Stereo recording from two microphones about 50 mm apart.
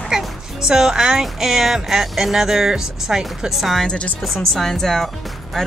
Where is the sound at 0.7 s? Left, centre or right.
Centre.